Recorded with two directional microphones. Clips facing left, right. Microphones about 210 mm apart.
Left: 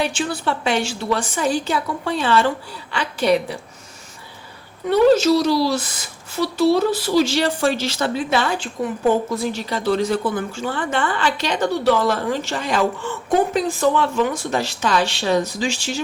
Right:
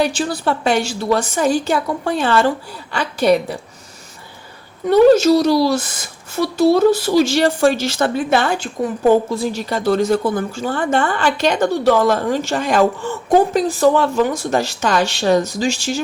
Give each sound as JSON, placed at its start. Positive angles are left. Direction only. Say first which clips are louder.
{"t": 0.0, "sound": "a woman's voice", "louder": "right 4 dB", "side_deg": -40}
{"t": 4.9, "sound": "a woman's voice", "louder": "right 4 dB", "side_deg": -45}
{"t": 9.3, "sound": "a woman's voice", "louder": "right 2 dB", "side_deg": -30}
{"t": 9.6, "sound": "a woman's voice", "louder": "right 4 dB", "side_deg": -45}